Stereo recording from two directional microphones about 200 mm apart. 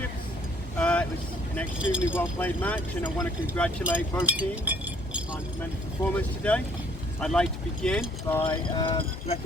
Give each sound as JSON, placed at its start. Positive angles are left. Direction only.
{"t": 0.8, "sound": "boat", "side_deg": 5}
{"t": 1.8, "sound": "speech", "side_deg": -5}
{"t": 2.1, "sound": "speech", "side_deg": 10}
{"t": 3.2, "sound": "speech", "side_deg": -5}
{"t": 6.1, "sound": "speech", "side_deg": 5}
{"t": 8.4, "sound": "speech", "side_deg": 25}